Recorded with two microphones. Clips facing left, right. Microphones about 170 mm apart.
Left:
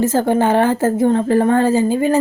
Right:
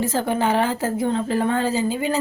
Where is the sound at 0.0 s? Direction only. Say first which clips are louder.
Left 6 dB; 45° left (ahead or behind).